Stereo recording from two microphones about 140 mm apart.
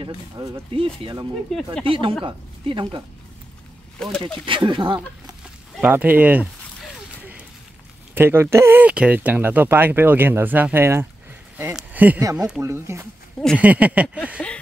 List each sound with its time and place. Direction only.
0.0 s speech: 30° right (ahead or behind)
0.7 s speech: 40° right (ahead or behind)
1.5 s speech: 5° left (ahead or behind)
1.9 s a woman's voice: 35° right (ahead or behind)
4.5 s speech: 35° right (ahead or behind)
5.8 s speech: 10° right (ahead or behind)
8.1 s speech: 15° right (ahead or behind)
12.2 s speech: 25° right (ahead or behind)
14.4 s a sound: 5° left (ahead or behind)